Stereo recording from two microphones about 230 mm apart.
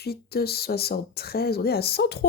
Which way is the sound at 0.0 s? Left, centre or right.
Left.